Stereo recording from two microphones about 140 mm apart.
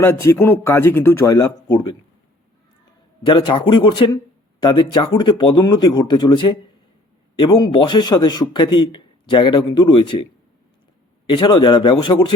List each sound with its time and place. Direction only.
0.0 s a man's voice: 20° left (ahead or behind)
3.2 s a man's voice: 35° left (ahead or behind)
11.3 s a man's voice: 35° left (ahead or behind)